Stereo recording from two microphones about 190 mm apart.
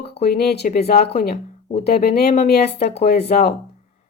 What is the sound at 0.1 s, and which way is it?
Speech, 55° left (ahead or behind).